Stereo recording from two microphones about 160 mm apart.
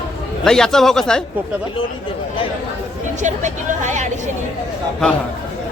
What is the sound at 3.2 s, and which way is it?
Speech, 50° right (ahead or behind).